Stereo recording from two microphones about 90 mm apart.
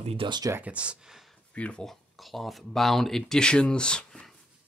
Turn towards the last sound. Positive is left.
turn(degrees=5)  # may be behind; listen again after turning